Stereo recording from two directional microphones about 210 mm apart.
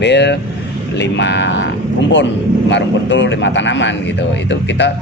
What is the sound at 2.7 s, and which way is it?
Speech, 60° left (ahead or behind).